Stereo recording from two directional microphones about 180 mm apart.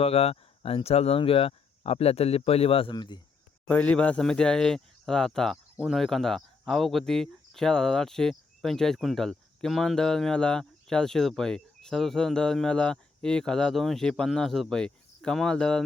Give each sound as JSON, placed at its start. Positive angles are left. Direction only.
{"t": 0.0, "sound": "speech", "side_deg": 35}
{"t": 3.7, "sound": "speech", "side_deg": 10}